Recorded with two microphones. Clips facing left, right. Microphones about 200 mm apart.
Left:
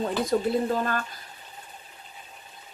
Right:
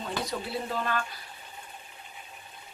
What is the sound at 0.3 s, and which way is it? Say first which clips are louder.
Speech: left 11 dB; 45° left (ahead or behind).